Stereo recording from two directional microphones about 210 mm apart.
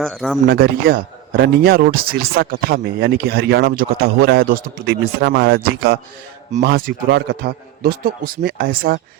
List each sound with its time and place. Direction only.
0.0 s speech: centre (ahead or behind)
0.4 s a man's voice: 45° right (ahead or behind)